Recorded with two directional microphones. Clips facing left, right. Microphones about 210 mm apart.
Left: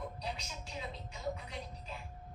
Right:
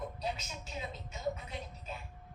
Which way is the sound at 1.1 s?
25° right (ahead or behind).